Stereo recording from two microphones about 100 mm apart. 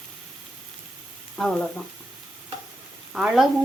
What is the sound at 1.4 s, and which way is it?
Speech, 5° left (ahead or behind).